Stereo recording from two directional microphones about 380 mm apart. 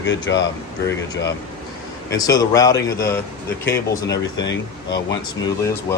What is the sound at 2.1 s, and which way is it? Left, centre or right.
Speech, centre.